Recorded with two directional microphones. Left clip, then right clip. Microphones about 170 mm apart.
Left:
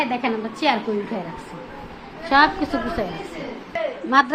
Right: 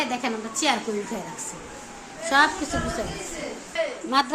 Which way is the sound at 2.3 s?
Centre (ahead or behind).